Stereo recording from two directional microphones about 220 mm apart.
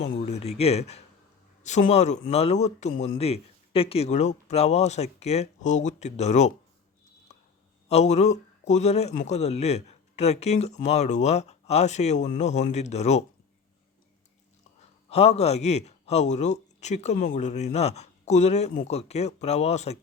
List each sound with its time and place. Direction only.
0.2 s a sound: 30° left (ahead or behind)
1.6 s a man's voice: 30° left (ahead or behind)
7.3 s clicking: 30° left (ahead or behind)
7.9 s a man's voice: 30° left (ahead or behind)
15.1 s a man's voice: 30° left (ahead or behind)